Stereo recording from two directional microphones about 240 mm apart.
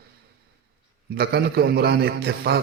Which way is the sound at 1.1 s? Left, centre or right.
Right.